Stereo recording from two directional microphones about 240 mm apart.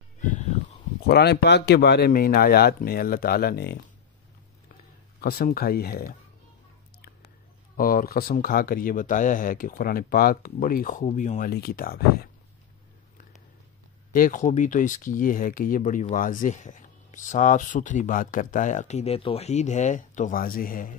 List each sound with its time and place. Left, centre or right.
0.2 s a sound: left
1.0 s speech: left
5.2 s speech: left
7.7 s speech: left
14.1 s speech: left